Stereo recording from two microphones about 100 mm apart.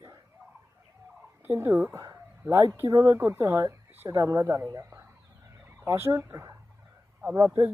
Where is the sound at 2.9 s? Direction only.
35° right (ahead or behind).